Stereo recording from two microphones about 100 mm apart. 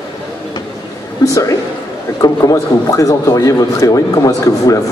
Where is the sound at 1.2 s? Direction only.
35° left (ahead or behind).